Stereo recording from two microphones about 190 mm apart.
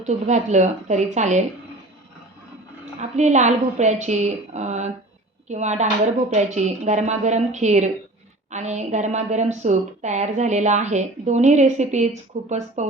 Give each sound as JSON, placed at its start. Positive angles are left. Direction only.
{"t": 0.0, "sound": "a woman's voice", "side_deg": -40}
{"t": 3.0, "sound": "a woman's voice", "side_deg": -40}